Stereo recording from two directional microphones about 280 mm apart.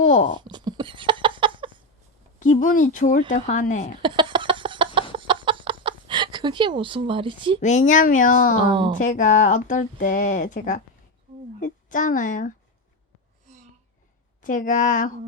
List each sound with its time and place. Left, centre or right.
0.0 s a sound: left
0.3 s a sound: centre
2.4 s speech: left
4.0 s chicken: centre
7.6 s a woman's voice: left
14.4 s speech: left